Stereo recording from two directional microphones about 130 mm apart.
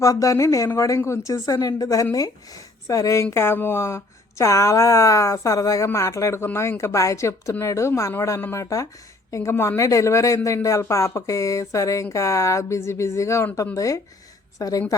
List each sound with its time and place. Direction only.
0.0 s speech: 25° left (ahead or behind)